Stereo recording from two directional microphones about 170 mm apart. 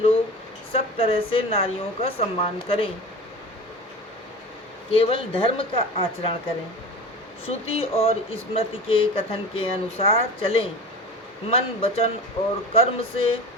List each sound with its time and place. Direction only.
0.7 s speech: 35° left (ahead or behind)
4.9 s speech: 35° left (ahead or behind)
7.4 s speech: 35° left (ahead or behind)